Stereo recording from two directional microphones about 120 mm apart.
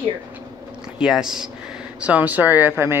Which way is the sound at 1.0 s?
5° right (ahead or behind).